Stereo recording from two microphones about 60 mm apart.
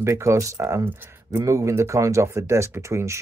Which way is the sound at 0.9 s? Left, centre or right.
Right.